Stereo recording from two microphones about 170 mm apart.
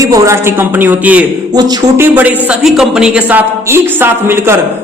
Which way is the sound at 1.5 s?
25° right (ahead or behind).